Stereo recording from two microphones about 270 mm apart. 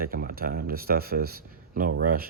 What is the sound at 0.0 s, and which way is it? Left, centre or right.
Speech, right.